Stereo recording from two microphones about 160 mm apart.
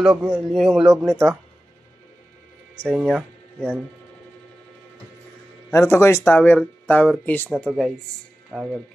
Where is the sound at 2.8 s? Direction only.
5° left (ahead or behind).